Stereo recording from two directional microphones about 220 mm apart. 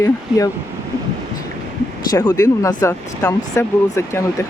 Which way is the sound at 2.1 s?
10° left (ahead or behind).